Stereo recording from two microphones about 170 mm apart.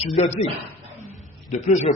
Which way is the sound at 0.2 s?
35° left (ahead or behind).